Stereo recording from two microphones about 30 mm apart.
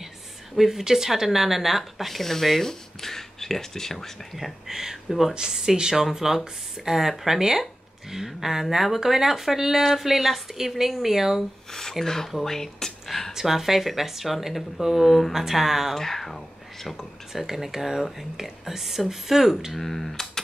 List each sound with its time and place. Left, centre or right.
0.6 s speech: centre
4.6 s speech: centre
5.3 s speech: right
11.7 s speech: centre
13.3 s speech: centre
15.3 s speech: centre
16.0 s speech: centre
17.5 s speech: centre
19.8 s speech: centre